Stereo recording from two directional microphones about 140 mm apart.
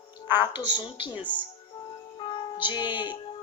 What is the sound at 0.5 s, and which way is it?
Speech, 35° left (ahead or behind).